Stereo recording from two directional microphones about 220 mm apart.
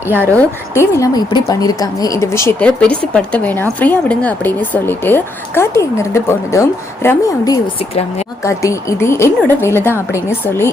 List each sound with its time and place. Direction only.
0.3 s speech: 10° left (ahead or behind)